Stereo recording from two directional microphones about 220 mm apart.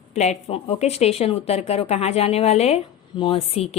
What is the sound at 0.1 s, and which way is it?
Speech, 30° left (ahead or behind).